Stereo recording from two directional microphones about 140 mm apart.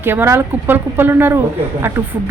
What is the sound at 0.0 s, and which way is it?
Speech, 15° right (ahead or behind).